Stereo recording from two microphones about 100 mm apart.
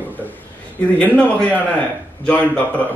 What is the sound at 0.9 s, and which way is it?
A man's voice, 10° left (ahead or behind).